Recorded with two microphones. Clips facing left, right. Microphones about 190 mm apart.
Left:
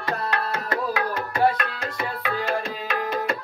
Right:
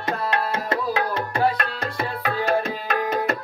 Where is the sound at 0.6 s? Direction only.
30° right (ahead or behind).